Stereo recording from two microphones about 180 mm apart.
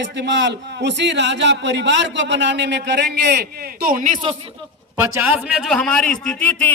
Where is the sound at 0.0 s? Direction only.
75° right (ahead or behind); by 4.2 s 45° right (ahead or behind).